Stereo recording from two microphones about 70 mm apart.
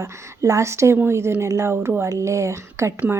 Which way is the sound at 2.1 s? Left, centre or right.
Right.